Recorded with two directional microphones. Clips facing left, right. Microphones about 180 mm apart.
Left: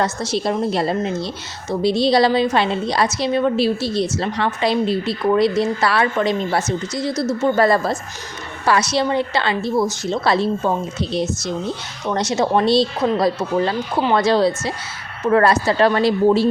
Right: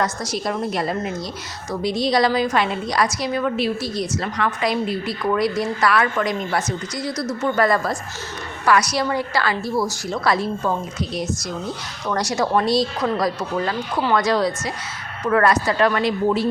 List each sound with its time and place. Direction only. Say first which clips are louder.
0.0 s a woman's voice: left 3 dB; 25° left (ahead or behind)